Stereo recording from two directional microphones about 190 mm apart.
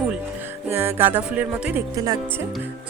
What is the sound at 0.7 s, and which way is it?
Speech, 10° right (ahead or behind).